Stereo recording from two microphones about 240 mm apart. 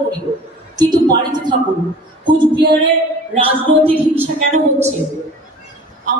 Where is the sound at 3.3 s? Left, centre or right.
Right.